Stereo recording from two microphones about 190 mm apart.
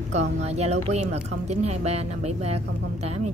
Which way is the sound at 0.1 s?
35° right (ahead or behind).